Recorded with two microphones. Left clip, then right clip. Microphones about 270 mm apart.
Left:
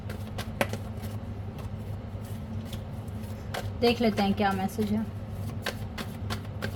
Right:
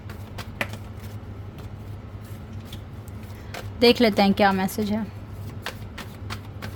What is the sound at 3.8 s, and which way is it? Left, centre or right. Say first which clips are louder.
A woman's voice: right 8 dB; right.